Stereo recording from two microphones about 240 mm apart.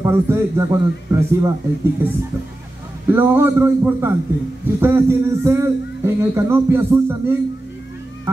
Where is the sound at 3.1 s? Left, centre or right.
Centre.